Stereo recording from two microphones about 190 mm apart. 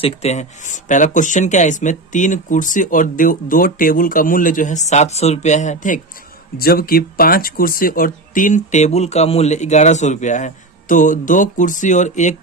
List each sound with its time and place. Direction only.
0.0 s speech: 35° left (ahead or behind)
6.6 s speech: 50° left (ahead or behind)